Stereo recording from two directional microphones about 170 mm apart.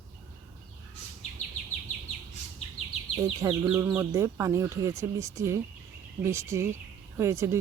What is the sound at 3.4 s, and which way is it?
A woman's voice, 15° right (ahead or behind).